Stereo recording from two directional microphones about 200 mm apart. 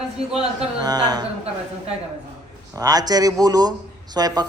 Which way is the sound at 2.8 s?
20° right (ahead or behind).